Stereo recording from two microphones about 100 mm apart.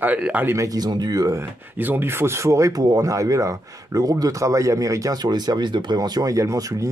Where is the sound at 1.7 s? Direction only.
20° right (ahead or behind).